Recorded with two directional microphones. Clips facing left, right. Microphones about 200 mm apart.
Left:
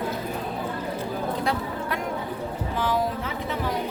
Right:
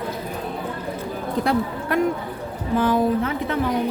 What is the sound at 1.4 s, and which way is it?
A woman's voice, 55° right (ahead or behind).